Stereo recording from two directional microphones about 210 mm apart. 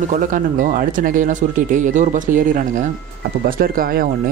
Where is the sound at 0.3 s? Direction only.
40° right (ahead or behind).